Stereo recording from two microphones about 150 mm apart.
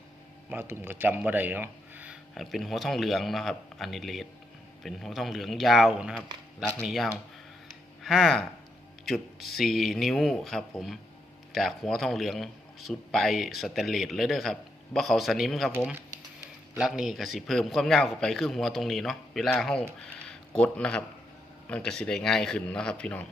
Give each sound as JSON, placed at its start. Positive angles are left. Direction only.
{"t": 0.5, "sound": "a man's voice", "side_deg": -15}
{"t": 2.3, "sound": "speech", "side_deg": 0}
{"t": 6.6, "sound": "a man's voice", "side_deg": 10}
{"t": 16.7, "sound": "speech", "side_deg": -5}
{"t": 20.2, "sound": "a sound", "side_deg": 5}
{"t": 21.7, "sound": "a man's voice", "side_deg": 5}